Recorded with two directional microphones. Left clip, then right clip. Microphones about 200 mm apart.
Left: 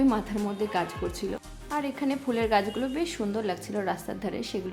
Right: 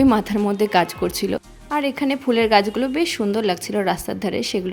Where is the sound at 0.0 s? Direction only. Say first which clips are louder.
Right 9 dB; 40° right (ahead or behind).